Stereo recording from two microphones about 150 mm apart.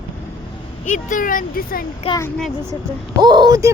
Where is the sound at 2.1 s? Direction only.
40° left (ahead or behind).